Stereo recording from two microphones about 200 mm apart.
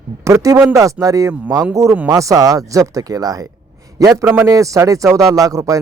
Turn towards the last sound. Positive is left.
turn(degrees=-15)  # may be behind; listen again after turning